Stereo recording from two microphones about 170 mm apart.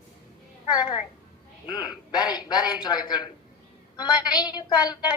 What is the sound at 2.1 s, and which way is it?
Speech, 25° left (ahead or behind).